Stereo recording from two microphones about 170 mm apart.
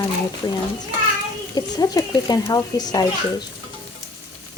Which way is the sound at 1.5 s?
20° left (ahead or behind).